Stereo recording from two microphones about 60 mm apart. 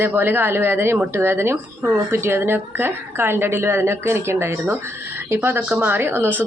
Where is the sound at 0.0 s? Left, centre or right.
Right.